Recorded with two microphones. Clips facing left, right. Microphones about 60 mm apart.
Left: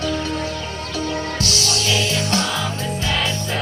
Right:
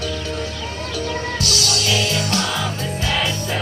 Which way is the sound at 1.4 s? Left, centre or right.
Left.